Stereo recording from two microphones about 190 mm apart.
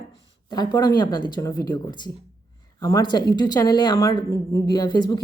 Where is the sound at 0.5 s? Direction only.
20° left (ahead or behind).